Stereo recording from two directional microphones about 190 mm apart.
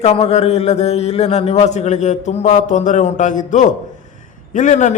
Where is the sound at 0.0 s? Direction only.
35° left (ahead or behind).